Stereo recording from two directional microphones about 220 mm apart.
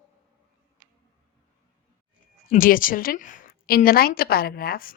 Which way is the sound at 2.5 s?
40° left (ahead or behind).